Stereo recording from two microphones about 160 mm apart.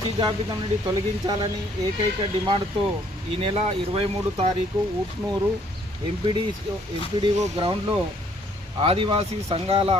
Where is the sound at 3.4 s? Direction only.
35° right (ahead or behind).